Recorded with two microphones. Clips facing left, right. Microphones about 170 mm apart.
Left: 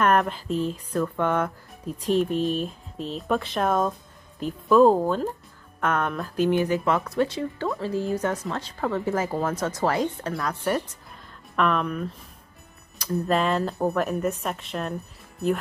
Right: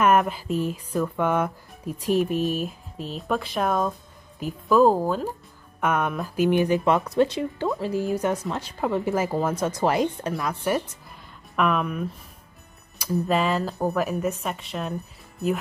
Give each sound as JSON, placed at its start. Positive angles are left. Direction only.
{"t": 0.0, "sound": "speech", "side_deg": -5}